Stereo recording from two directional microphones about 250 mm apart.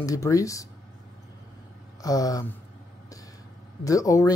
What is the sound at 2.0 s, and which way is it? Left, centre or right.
Speech, centre.